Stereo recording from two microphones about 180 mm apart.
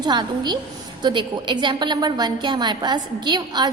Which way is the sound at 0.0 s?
25° right (ahead or behind).